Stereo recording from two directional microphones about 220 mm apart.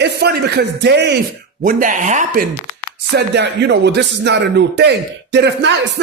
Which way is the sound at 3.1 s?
50° right (ahead or behind).